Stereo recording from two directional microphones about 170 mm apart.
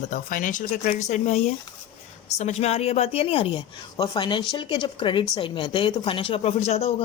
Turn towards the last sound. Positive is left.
turn(degrees=40)  # may be behind; listen again after turning